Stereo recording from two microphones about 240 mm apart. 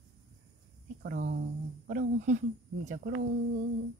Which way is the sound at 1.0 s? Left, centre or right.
Right.